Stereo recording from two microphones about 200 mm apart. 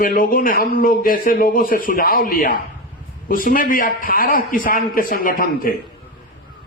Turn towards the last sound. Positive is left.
turn(degrees=45)  # may be behind; listen again after turning